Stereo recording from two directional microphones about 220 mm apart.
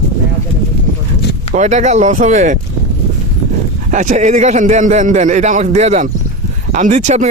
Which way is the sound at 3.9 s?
35° right (ahead or behind).